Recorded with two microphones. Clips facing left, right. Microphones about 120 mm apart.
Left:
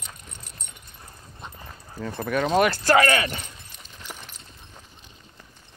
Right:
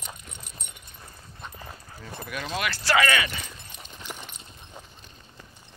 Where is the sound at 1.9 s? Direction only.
55° left (ahead or behind).